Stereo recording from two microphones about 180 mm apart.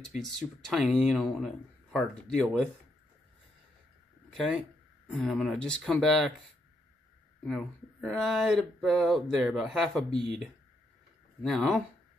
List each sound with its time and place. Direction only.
0.0 s speech: centre (ahead or behind)
4.3 s speech: centre (ahead or behind)
7.4 s speech: centre (ahead or behind)